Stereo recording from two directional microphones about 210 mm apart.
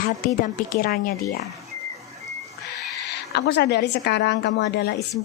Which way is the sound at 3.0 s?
55° left (ahead or behind).